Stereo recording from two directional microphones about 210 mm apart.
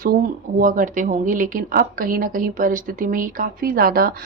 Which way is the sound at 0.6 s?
40° right (ahead or behind).